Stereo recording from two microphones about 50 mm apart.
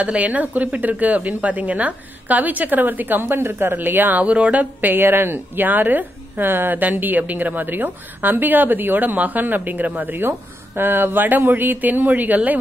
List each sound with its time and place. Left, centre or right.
0.0 s speech: right
4.9 s speech: right